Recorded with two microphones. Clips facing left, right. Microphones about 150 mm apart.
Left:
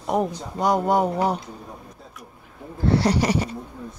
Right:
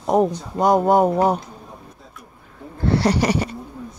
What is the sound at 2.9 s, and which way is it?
Speech, 70° right (ahead or behind).